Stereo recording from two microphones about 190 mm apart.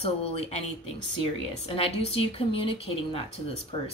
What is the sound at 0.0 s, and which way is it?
Speech, 35° left (ahead or behind).